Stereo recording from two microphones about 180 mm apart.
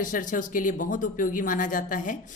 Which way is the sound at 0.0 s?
45° left (ahead or behind).